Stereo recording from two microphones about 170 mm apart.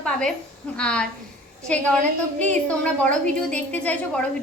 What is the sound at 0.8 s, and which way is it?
A woman's voice, 5° left (ahead or behind).